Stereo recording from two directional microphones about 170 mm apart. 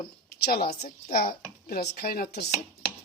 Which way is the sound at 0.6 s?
45° left (ahead or behind).